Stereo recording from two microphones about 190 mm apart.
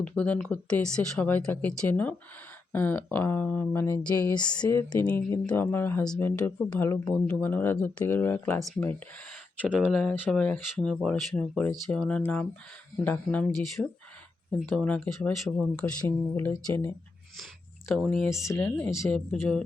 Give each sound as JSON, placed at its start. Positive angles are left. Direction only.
{"t": 0.0, "sound": "speech", "side_deg": 5}
{"t": 4.4, "sound": "speech", "side_deg": 20}
{"t": 8.5, "sound": "speech", "side_deg": 0}
{"t": 17.9, "sound": "speech", "side_deg": 5}
{"t": 18.4, "sound": "speech", "side_deg": 15}